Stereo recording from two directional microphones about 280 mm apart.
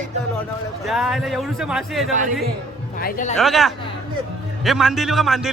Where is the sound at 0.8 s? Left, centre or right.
Centre.